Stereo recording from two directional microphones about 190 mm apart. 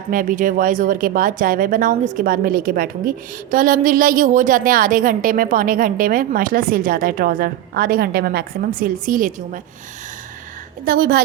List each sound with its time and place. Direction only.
0.1 s a woman's voice: 45° right (ahead or behind)
10.8 s a woman's voice: 50° right (ahead or behind)